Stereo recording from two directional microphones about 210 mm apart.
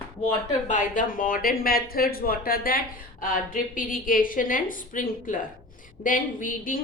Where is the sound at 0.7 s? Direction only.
40° left (ahead or behind).